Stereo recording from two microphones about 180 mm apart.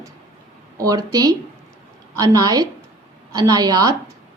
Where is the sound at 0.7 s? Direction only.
20° right (ahead or behind).